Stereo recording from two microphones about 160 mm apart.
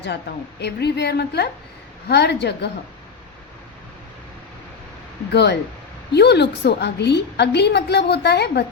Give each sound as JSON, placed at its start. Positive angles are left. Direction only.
{"t": 0.6, "sound": "a woman's voice", "side_deg": 90}
{"t": 5.3, "sound": "a woman's voice", "side_deg": 90}